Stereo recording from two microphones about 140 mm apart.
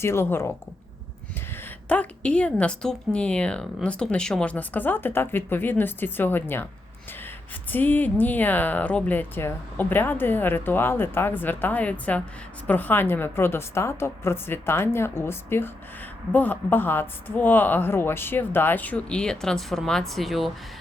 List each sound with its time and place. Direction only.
0.0 s a woman's voice: 15° left (ahead or behind)
1.9 s a woman's voice: 10° left (ahead or behind)
7.7 s a woman's voice: 15° left (ahead or behind)